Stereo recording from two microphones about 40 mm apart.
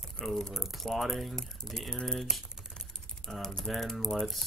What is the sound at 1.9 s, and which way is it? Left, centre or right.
Speech, left.